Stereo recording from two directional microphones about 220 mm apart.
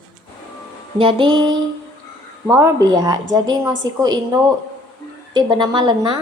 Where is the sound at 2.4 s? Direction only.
10° right (ahead or behind).